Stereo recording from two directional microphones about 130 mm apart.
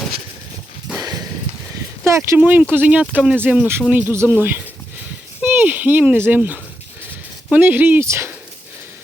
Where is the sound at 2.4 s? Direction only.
10° right (ahead or behind).